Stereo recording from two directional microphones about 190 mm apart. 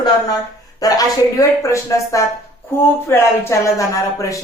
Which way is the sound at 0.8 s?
20° left (ahead or behind).